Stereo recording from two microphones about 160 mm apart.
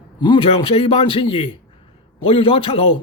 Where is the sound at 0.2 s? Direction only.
30° left (ahead or behind).